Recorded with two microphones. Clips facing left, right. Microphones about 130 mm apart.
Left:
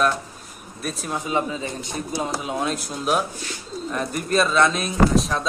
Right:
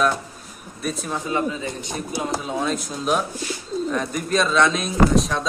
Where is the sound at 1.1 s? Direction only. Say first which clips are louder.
Left 2 dB; 15° left (ahead or behind).